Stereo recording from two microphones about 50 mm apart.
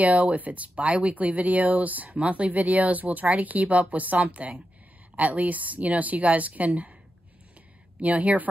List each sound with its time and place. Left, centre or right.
0.0 s speech: right
8.0 s speech: right